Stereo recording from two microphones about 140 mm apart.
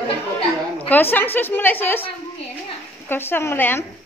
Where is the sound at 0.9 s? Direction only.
15° left (ahead or behind).